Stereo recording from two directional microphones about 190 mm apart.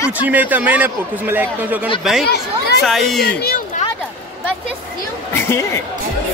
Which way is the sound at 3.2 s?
55° left (ahead or behind).